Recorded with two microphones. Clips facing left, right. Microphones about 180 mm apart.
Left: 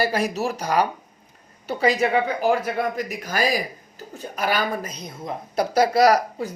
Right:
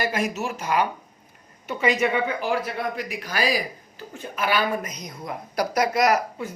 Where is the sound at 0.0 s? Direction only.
35° left (ahead or behind).